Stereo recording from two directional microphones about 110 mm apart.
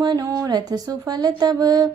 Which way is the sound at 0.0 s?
35° right (ahead or behind).